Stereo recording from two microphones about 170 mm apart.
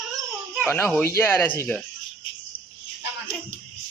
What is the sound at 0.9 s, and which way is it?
Speech, 15° left (ahead or behind).